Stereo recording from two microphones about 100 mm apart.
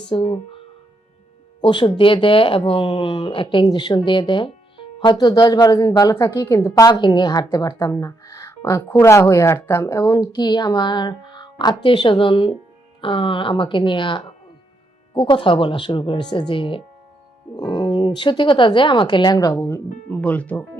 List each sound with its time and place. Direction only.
0.0 s speech: 60° left (ahead or behind)
1.6 s speech: 55° left (ahead or behind)
5.1 s speech: 45° left (ahead or behind)
6.8 s speech: 45° left (ahead or behind)
19.6 s speech: 20° left (ahead or behind)